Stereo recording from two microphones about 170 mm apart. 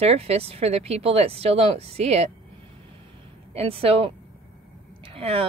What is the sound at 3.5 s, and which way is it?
A woman's voice, 35° right (ahead or behind).